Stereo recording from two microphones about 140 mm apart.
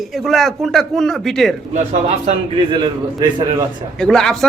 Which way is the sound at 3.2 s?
30° right (ahead or behind).